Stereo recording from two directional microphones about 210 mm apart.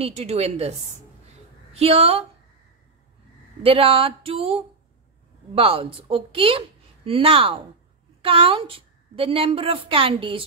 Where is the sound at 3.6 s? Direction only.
25° right (ahead or behind).